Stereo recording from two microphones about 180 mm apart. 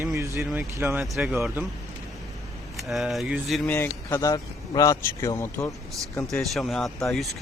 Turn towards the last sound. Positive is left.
turn(degrees=0)  # may be behind; listen again after turning